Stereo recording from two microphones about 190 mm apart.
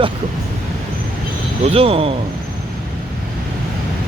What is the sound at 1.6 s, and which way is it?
Speech, 30° right (ahead or behind).